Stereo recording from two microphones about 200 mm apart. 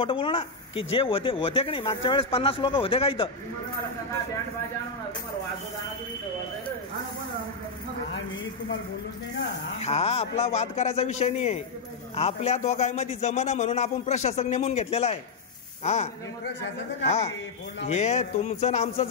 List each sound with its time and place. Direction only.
0.0 s speech: 25° left (ahead or behind)
9.8 s a man's voice: 30° left (ahead or behind)